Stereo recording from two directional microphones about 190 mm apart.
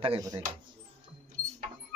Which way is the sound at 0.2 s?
20° right (ahead or behind).